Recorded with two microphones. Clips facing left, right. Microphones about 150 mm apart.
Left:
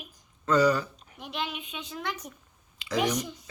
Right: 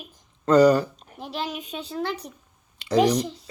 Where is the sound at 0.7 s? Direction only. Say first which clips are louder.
Right 8 dB; 35° right (ahead or behind).